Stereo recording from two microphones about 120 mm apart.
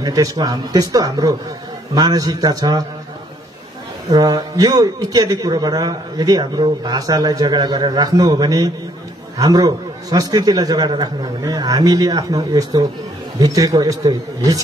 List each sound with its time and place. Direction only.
0.0 s a man's voice: 30° right (ahead or behind)
4.1 s a man's voice: 30° right (ahead or behind)